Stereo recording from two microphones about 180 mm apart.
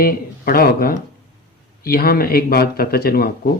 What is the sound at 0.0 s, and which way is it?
Speech, 55° left (ahead or behind).